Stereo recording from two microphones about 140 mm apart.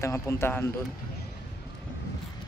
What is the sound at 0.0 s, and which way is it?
Speech, 20° left (ahead or behind).